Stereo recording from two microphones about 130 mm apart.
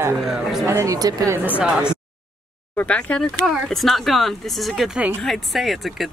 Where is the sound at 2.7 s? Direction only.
10° left (ahead or behind).